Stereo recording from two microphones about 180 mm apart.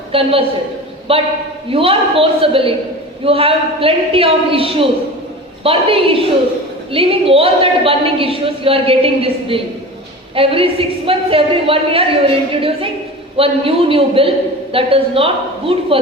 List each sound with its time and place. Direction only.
0.1 s a woman's voice: 30° right (ahead or behind)